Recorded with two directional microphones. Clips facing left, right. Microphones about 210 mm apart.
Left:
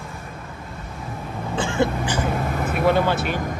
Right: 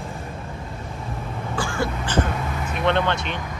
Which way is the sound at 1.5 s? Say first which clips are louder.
Left 5 dB; 20° left (ahead or behind).